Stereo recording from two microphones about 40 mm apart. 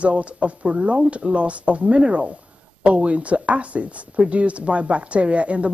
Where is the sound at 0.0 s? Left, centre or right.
Right.